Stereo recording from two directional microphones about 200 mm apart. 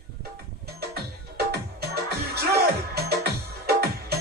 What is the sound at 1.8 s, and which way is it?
Music, 55° right (ahead or behind).